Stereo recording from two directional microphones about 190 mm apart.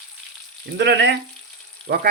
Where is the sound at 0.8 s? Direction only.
65° right (ahead or behind).